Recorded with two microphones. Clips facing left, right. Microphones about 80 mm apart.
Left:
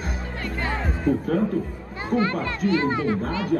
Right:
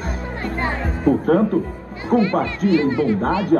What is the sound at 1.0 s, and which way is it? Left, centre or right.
A man's voice, right.